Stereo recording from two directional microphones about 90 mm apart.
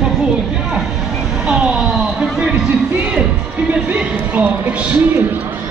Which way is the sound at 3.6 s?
20° right (ahead or behind).